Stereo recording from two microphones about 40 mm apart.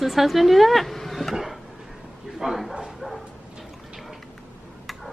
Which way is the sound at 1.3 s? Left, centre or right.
Centre.